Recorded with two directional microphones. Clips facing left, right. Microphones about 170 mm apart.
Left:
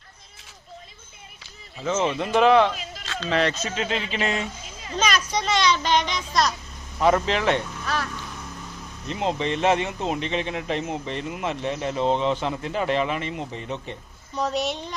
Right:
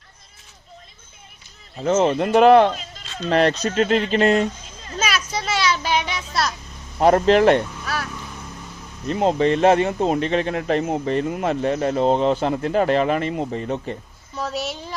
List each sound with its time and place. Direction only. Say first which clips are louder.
1.8 s speech: right 6 dB; 45° right (ahead or behind)
4.9 s children playing: left 1 dB; 5° right (ahead or behind)
7.0 s speech: right 7 dB; 45° right (ahead or behind)
7.9 s speech: even; 10° right (ahead or behind)
9.0 s speech: right 7 dB; 45° right (ahead or behind)
14.3 s a woman's voice: left 2 dB; centre (ahead or behind)